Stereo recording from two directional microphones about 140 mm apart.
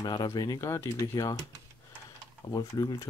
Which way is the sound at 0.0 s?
30° left (ahead or behind).